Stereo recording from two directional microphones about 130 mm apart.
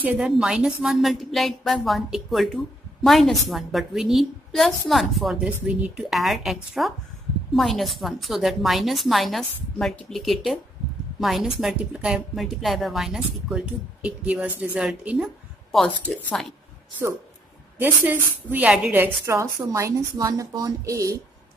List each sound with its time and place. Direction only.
0.0 s a woman's voice: 5° right (ahead or behind)
17.7 s a woman's voice: 15° right (ahead or behind)